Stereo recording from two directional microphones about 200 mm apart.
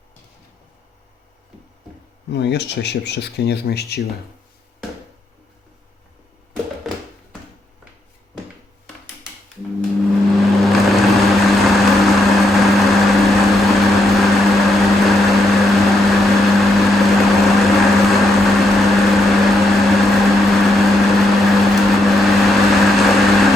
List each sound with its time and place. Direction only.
2.3 s speech: 60° left (ahead or behind)
6.8 s a sound: centre (ahead or behind)
10.4 s vehicle: centre (ahead or behind)